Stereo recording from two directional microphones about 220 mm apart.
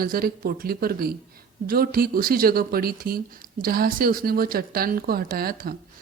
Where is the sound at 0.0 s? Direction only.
40° right (ahead or behind).